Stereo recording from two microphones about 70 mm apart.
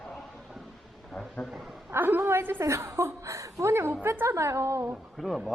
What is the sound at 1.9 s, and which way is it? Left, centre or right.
A woman's voice, right.